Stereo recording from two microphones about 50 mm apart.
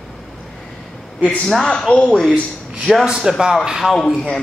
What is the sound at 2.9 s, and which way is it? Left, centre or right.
A man's voice, centre.